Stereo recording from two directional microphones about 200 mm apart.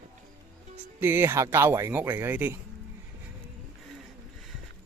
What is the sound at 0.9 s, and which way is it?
Speech, 10° right (ahead or behind).